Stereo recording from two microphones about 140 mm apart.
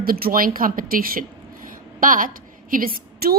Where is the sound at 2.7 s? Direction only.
90° right.